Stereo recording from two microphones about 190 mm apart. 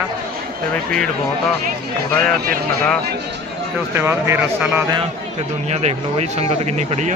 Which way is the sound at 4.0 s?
10° right (ahead or behind).